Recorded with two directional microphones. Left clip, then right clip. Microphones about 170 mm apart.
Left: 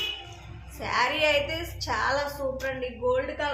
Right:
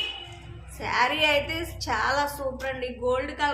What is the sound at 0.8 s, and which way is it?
A woman's voice, 20° right (ahead or behind).